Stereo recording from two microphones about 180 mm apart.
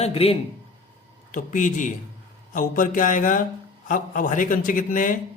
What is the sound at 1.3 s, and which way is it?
Speech, 45° left (ahead or behind).